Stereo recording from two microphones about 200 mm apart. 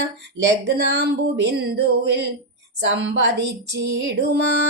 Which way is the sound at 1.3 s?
60° right (ahead or behind).